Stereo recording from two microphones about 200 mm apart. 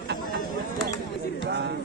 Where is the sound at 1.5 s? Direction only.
55° right (ahead or behind).